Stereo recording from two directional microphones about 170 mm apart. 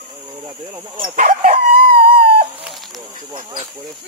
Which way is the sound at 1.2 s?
50° right (ahead or behind).